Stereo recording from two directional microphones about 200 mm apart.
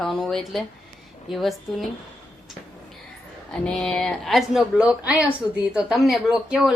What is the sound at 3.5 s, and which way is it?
Speech, 5° left (ahead or behind).